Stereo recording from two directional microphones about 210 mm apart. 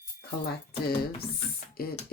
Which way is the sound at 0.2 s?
45° left (ahead or behind).